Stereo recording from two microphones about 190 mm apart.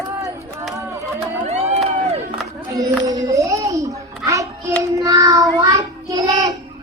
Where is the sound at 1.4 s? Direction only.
35° right (ahead or behind).